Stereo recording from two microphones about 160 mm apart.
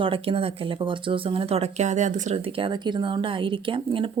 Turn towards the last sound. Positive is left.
turn(degrees=-35)  # may be behind; listen again after turning